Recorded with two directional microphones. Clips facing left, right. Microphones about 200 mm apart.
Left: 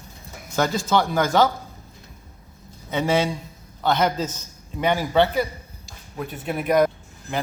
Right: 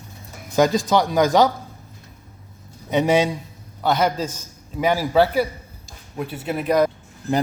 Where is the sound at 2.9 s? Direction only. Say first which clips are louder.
Right 4 dB; 20° right (ahead or behind); by 6.9 s centre (ahead or behind).